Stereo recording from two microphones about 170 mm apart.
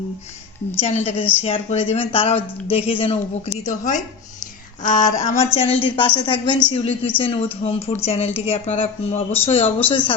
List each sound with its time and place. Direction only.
0.8 s speech: 40° left (ahead or behind)
4.8 s a sound: 45° left (ahead or behind)
5.5 s a woman's voice: 35° left (ahead or behind)